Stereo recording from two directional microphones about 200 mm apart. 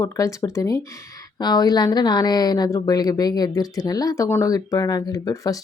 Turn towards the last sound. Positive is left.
turn(degrees=15)  # may be behind; listen again after turning